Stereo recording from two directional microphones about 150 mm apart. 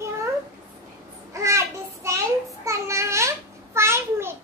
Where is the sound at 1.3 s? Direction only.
20° right (ahead or behind).